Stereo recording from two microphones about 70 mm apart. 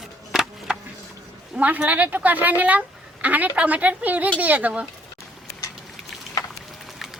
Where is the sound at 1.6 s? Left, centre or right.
Right.